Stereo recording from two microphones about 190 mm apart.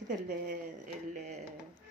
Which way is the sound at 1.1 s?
40° right (ahead or behind).